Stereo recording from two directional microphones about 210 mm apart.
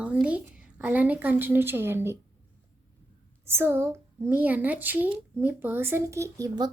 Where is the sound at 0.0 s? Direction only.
5° right (ahead or behind).